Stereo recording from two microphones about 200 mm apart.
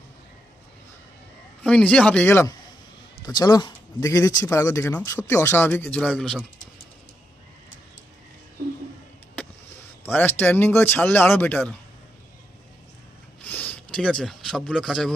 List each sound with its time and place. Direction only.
1.6 s speech: 5° left (ahead or behind)
10.1 s speech: 10° left (ahead or behind)
13.4 s speech: 10° left (ahead or behind)